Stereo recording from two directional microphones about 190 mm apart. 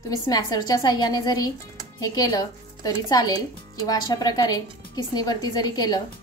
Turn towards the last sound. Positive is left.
turn(degrees=20)  # may be behind; listen again after turning